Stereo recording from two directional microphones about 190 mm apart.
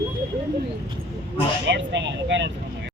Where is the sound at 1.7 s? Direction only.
70° right (ahead or behind).